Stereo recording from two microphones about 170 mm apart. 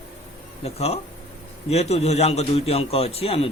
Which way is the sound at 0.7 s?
35° left (ahead or behind).